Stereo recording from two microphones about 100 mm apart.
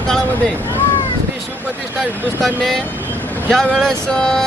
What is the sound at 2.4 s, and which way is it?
A man's voice, centre (ahead or behind).